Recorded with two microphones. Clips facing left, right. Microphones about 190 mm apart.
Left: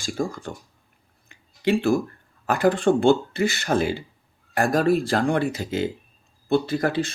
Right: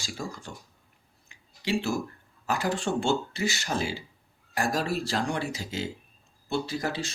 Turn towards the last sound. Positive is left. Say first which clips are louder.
# left 8 dB
turn(degrees=55)  # may be behind; listen again after turning